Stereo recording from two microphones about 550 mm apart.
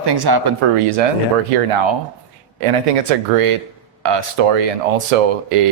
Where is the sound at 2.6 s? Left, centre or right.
Right.